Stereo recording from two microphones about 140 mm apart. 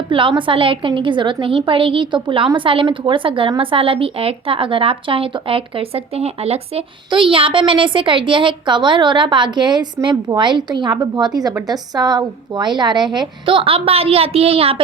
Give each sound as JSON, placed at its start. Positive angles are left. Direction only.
{"t": 0.1, "sound": "speech", "side_deg": -35}